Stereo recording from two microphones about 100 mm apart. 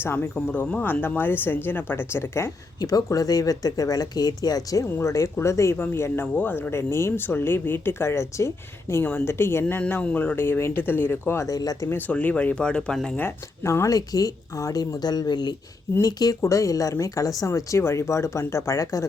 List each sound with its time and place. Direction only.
0.0 s speech: 25° left (ahead or behind)
0.3 s speech: 10° left (ahead or behind)
2.8 s speech: 35° left (ahead or behind)
4.9 s speech: 25° left (ahead or behind)
10.3 s speech: 25° left (ahead or behind)
11.4 s speech: 40° left (ahead or behind)
11.9 s speech: 20° left (ahead or behind)
13.1 s speech: 25° left (ahead or behind)